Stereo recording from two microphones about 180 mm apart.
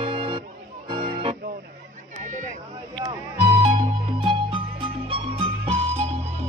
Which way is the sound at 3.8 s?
25° right (ahead or behind).